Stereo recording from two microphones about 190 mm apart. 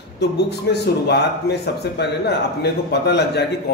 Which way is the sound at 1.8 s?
60° left (ahead or behind).